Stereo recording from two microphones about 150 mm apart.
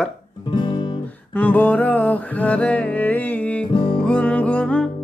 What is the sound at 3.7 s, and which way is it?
Music, 35° left (ahead or behind).